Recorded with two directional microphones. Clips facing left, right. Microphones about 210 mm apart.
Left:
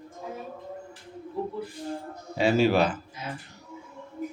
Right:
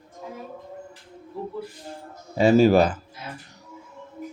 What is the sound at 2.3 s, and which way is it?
Speech, 45° right (ahead or behind).